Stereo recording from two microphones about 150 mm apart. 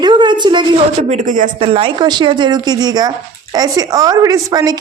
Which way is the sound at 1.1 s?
60° right (ahead or behind).